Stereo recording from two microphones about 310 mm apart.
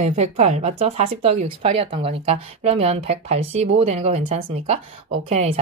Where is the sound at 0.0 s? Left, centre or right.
Right.